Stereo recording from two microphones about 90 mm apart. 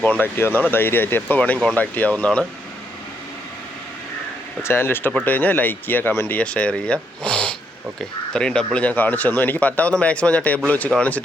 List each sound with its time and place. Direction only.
0.0 s speech: 15° left (ahead or behind)
4.6 s speech: 25° left (ahead or behind)